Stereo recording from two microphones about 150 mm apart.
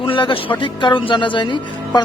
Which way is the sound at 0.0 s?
35° left (ahead or behind).